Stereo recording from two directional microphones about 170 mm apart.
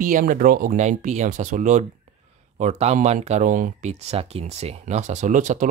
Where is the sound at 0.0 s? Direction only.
55° right (ahead or behind).